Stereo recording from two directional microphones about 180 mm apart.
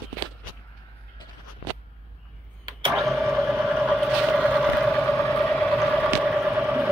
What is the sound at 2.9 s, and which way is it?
Printer, centre (ahead or behind).